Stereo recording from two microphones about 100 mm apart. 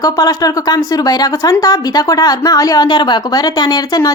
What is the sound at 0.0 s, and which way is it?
A woman's voice, 40° left (ahead or behind).